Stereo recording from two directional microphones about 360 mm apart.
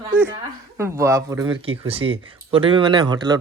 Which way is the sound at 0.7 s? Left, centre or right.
Centre.